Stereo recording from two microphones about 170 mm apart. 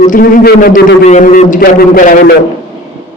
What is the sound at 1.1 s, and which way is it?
A man's voice, 50° left (ahead or behind).